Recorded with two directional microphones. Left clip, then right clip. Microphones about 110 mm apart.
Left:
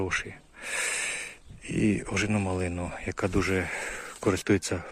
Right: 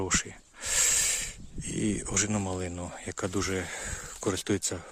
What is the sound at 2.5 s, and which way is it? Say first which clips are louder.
Speech: left 4 dB; 15° right (ahead or behind).